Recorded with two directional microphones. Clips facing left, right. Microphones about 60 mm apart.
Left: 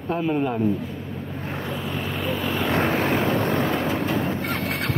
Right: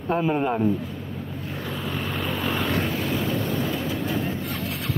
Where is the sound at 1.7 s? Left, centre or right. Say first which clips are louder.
Right 1 dB; centre.